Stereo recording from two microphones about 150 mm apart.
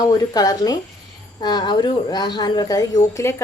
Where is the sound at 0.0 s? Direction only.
25° left (ahead or behind).